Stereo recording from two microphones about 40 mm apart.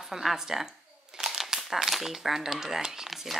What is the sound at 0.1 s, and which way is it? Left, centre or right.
Speech, centre.